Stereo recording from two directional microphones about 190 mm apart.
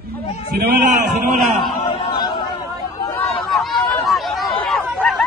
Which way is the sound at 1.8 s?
25° left (ahead or behind).